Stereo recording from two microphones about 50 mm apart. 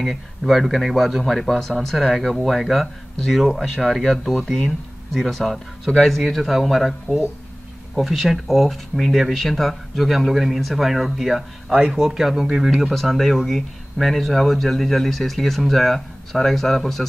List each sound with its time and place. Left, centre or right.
0.0 s speech: centre
11.7 s speech: centre
12.0 s speech: centre